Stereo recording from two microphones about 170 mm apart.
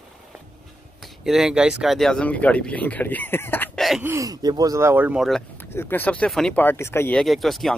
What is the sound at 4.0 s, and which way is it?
Speech, 15° right (ahead or behind).